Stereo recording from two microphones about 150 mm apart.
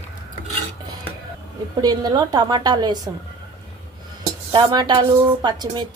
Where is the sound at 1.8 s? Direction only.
25° right (ahead or behind).